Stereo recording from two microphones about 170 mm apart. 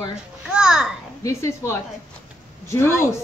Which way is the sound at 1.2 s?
15° left (ahead or behind).